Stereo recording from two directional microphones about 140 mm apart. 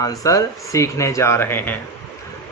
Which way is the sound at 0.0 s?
25° left (ahead or behind).